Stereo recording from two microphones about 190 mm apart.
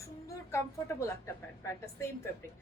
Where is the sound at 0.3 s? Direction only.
15° left (ahead or behind).